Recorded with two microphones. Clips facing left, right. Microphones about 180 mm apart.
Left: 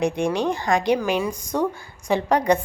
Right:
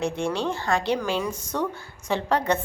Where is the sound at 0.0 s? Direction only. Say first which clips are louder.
Left 4 dB; 15° left (ahead or behind).